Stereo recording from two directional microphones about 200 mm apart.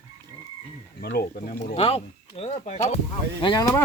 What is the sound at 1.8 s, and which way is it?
Speech, 30° left (ahead or behind).